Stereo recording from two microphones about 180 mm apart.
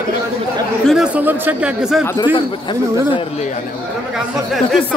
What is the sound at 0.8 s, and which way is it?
Speech, 5° right (ahead or behind).